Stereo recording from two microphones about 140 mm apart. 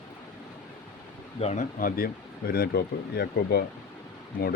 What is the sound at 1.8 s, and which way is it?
Speech, 90° left.